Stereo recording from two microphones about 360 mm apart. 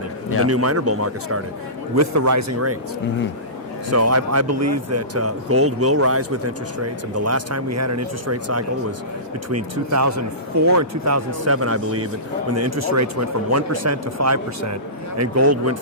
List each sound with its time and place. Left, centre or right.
0.4 s speech: right
3.8 s speech: right